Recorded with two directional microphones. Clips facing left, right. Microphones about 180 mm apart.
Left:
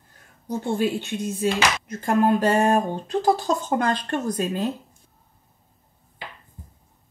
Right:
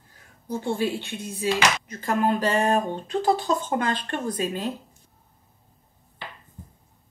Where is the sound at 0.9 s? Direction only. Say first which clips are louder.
Left 5 dB; 50° left (ahead or behind).